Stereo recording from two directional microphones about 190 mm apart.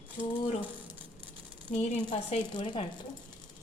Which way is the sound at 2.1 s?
25° left (ahead or behind).